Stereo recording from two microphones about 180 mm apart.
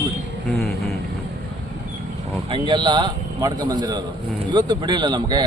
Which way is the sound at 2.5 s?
25° right (ahead or behind).